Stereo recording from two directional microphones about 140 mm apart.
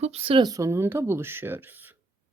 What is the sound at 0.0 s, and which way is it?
Speech, 45° right (ahead or behind).